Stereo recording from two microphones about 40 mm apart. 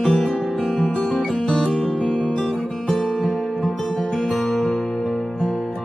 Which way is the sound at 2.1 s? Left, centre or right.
Centre.